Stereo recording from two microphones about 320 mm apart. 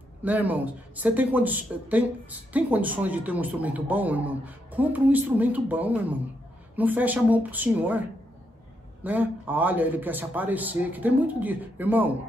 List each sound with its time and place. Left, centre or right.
0.2 s a man's voice: centre
9.0 s a man's voice: centre